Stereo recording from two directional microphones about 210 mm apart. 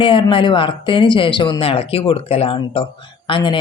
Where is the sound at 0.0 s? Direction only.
25° left (ahead or behind).